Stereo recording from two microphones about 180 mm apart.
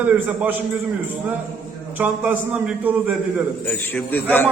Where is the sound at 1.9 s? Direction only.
10° right (ahead or behind).